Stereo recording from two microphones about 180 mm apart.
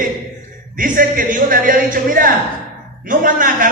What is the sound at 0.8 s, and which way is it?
Speech, 50° right (ahead or behind).